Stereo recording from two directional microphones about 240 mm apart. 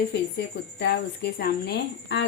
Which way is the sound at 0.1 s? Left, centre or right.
Left.